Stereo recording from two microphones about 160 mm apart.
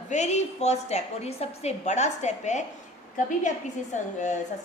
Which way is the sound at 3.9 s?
50° left (ahead or behind).